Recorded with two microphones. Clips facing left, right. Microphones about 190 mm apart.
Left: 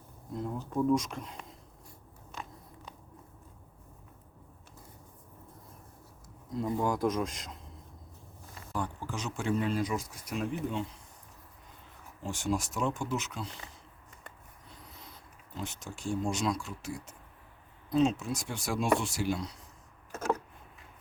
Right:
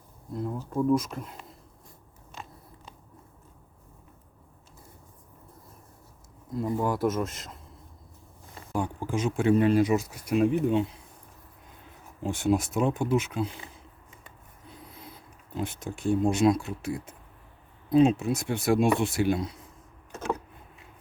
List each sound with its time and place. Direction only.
0.7 s speech: 5° right (ahead or behind)
6.6 s speech: 5° right (ahead or behind)
9.0 s speech: 50° right (ahead or behind); by 10.8 s 65° right (ahead or behind)
12.2 s speech: 60° right (ahead or behind)
14.8 s speech: 55° right (ahead or behind)
17.9 s speech: 60° right (ahead or behind)